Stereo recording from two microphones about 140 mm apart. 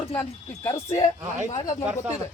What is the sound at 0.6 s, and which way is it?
Speech, 20° left (ahead or behind).